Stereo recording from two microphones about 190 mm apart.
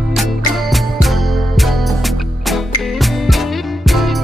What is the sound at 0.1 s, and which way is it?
Music, centre (ahead or behind).